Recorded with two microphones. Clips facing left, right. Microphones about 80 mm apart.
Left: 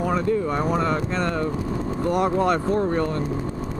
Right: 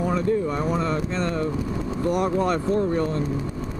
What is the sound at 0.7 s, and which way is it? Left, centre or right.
Speech, left.